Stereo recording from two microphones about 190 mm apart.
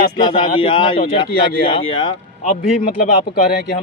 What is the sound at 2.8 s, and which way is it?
Speech, 45° left (ahead or behind).